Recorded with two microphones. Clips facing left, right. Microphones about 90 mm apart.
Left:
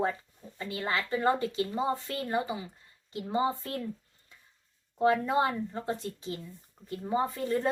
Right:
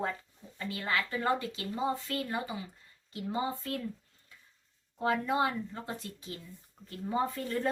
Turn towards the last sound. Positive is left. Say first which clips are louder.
# left 3 dB
turn(degrees=20)  # may be behind; listen again after turning